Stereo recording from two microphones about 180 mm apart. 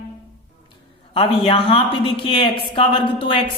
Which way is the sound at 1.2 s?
30° left (ahead or behind).